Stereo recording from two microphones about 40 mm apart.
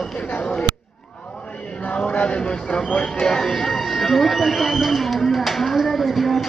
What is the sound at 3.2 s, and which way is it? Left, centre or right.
Speech, centre.